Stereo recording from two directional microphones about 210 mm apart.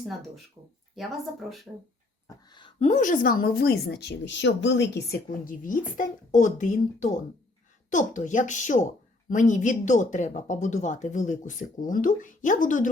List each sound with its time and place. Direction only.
0.9 s speech: centre (ahead or behind)
2.2 s a woman's voice: 20° left (ahead or behind); by 12.9 s 40° left (ahead or behind)